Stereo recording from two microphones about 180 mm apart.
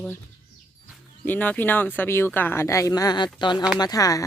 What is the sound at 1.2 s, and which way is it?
Speech, 10° left (ahead or behind).